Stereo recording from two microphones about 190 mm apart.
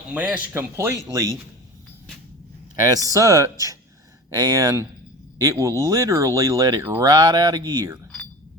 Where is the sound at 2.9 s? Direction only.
20° right (ahead or behind).